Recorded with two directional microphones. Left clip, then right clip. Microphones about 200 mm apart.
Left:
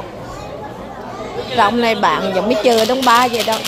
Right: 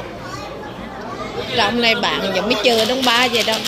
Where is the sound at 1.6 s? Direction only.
15° left (ahead or behind).